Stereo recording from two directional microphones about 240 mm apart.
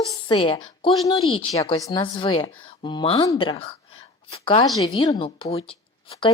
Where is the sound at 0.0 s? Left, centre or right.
Centre.